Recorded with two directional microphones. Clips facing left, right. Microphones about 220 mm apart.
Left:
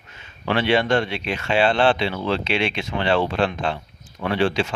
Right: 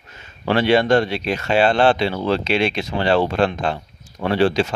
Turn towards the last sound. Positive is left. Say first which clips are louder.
# right 4 dB
turn(degrees=-40)  # may be behind; listen again after turning